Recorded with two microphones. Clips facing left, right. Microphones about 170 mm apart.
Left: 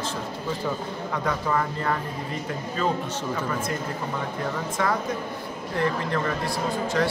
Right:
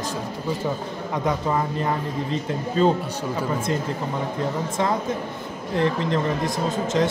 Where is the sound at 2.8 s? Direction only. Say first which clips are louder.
Right 7 dB; 30° right (ahead or behind).